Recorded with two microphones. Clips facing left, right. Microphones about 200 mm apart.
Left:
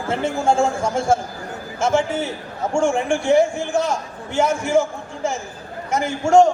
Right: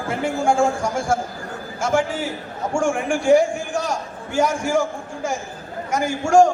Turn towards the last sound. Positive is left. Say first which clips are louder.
# left 1 dB
turn(degrees=25)  # may be behind; listen again after turning